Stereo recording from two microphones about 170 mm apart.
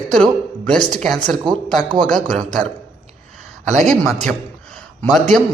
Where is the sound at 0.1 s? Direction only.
5° left (ahead or behind).